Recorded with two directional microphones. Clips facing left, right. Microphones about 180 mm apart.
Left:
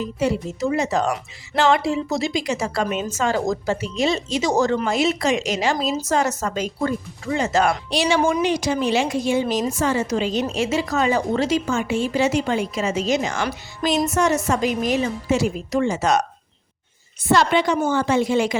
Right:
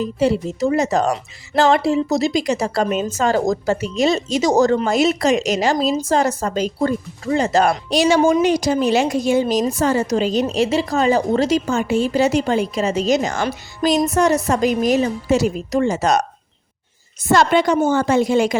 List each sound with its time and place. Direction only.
0.2 s a woman's voice: 35° right (ahead or behind)